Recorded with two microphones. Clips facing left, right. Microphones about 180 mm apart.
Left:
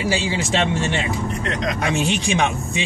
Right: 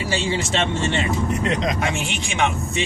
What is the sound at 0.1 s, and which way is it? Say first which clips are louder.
Speech: right 2 dB; 15° left (ahead or behind).